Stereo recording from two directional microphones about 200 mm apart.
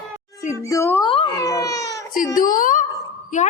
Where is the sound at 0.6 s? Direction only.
15° left (ahead or behind).